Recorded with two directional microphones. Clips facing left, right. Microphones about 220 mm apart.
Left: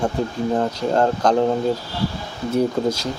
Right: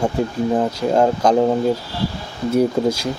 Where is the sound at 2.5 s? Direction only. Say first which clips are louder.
Right 3 dB; 10° right (ahead or behind).